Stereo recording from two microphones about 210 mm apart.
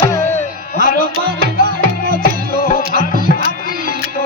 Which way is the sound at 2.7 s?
40° left (ahead or behind).